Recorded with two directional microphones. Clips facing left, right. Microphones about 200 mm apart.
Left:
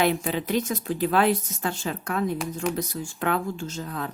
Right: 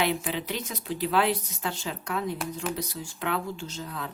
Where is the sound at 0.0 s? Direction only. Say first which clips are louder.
Left 4 dB; 45° left (ahead or behind).